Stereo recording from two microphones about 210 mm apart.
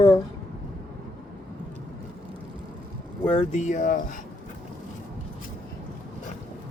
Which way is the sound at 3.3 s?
35° left (ahead or behind).